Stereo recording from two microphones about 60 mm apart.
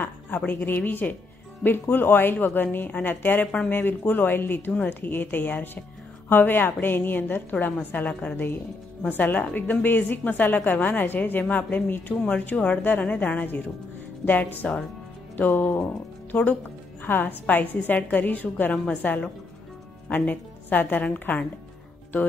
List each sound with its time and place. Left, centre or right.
0.5 s a woman's voice: left